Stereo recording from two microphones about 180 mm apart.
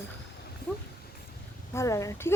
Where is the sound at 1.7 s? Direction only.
15° left (ahead or behind).